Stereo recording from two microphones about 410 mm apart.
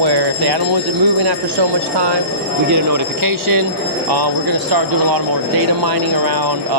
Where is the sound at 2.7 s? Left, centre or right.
Right.